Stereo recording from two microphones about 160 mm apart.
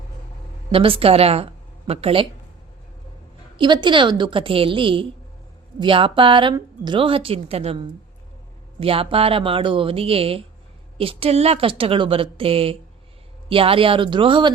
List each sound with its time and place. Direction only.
0.7 s a woman's voice: 35° right (ahead or behind)
3.6 s a woman's voice: 30° right (ahead or behind)